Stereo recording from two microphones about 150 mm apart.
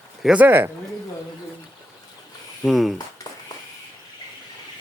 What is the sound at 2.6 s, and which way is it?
Speech, centre (ahead or behind).